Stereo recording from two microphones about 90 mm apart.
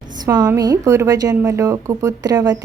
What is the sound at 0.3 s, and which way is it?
A woman's voice, 40° right (ahead or behind).